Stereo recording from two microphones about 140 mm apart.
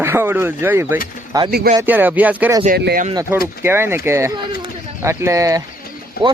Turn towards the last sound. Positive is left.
turn(degrees=90)